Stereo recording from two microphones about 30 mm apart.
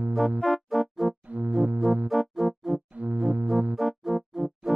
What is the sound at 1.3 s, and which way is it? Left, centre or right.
Music, right.